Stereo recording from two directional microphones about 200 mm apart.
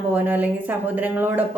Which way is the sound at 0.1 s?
10° right (ahead or behind).